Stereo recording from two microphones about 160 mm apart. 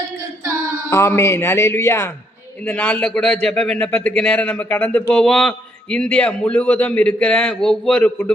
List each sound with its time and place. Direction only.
0.9 s a man's voice: 15° left (ahead or behind)